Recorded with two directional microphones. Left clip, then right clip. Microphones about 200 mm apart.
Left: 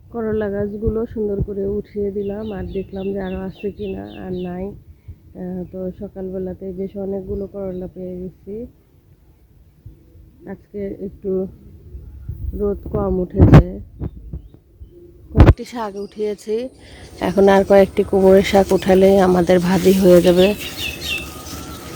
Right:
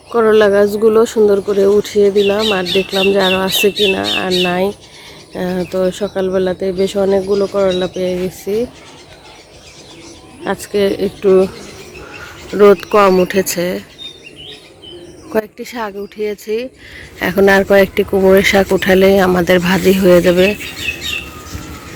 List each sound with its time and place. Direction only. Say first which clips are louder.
0.1 s speech: right 13 dB; 10° right (ahead or behind)
10.4 s speech: right 14 dB; 20° right (ahead or behind)
12.5 s speech: right 14 dB; 25° right (ahead or behind)
13.2 s speech: even; 10° right (ahead or behind)
15.5 s speech: right 4 dB; centre (ahead or behind)